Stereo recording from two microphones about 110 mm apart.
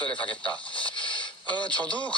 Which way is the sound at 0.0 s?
10° left (ahead or behind).